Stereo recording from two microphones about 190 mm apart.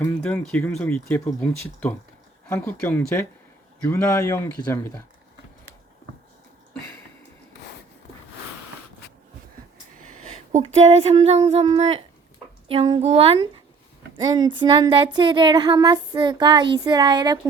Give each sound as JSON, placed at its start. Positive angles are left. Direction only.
{"t": 0.0, "sound": "speech", "side_deg": 5}
{"t": 10.5, "sound": "speech", "side_deg": -35}